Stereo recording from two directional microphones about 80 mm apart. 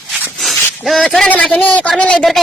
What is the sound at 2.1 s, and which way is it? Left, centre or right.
Speech, centre.